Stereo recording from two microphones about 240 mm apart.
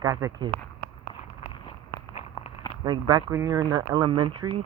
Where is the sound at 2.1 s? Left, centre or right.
Left.